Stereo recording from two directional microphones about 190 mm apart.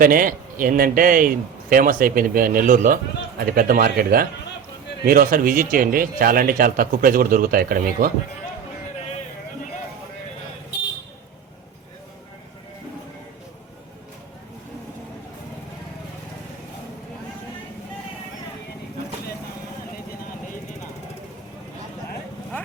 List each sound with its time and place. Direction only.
0.0 s speech: 50° right (ahead or behind)